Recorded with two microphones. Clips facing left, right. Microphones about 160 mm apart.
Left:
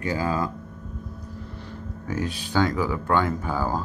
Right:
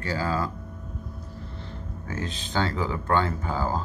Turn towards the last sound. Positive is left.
turn(degrees=15)  # may be behind; listen again after turning